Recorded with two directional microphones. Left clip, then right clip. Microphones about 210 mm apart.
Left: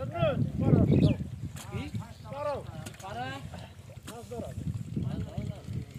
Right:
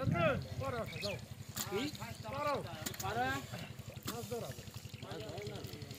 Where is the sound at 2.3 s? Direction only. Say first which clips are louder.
Left 3 dB; 35° left (ahead or behind).